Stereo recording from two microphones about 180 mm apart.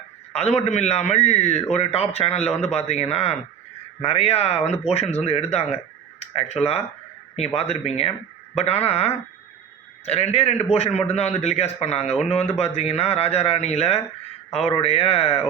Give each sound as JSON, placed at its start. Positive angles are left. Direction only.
{"t": 0.3, "sound": "a man's voice", "side_deg": 35}